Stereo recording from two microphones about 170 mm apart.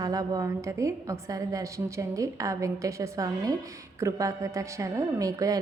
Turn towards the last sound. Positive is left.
turn(degrees=-20)  # may be behind; listen again after turning